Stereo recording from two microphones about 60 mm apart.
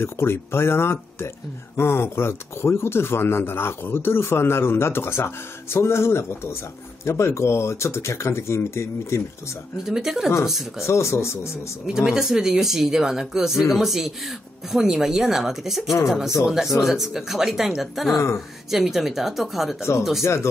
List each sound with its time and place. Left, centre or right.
0.0 s speech: left
9.8 s speech: centre
10.9 s speech: left
11.8 s speech: centre